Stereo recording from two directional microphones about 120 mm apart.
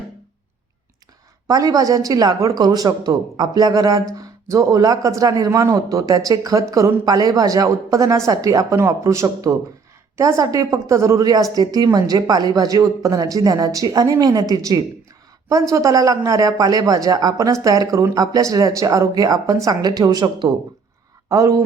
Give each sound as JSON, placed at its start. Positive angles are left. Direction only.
{"t": 1.5, "sound": "a woman's voice", "side_deg": -30}